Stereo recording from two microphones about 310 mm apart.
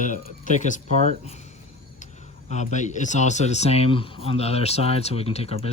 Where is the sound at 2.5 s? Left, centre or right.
Left.